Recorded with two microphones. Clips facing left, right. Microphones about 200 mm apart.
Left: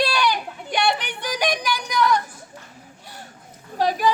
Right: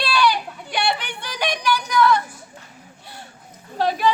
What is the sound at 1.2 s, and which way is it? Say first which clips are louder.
Music: left 2 dB; 15° left (ahead or behind).